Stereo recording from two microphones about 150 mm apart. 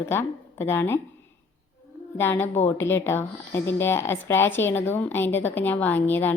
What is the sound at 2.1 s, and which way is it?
Speech, 15° left (ahead or behind).